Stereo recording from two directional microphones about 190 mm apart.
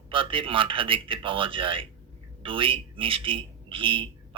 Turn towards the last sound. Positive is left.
turn(degrees=-30)  # may be behind; listen again after turning